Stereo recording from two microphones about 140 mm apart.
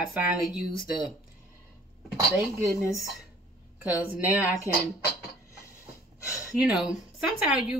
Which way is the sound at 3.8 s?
10° right (ahead or behind).